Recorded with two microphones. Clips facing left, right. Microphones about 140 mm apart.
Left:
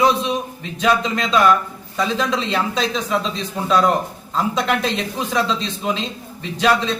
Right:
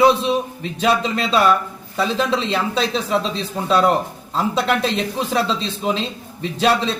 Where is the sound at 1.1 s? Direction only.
35° right (ahead or behind).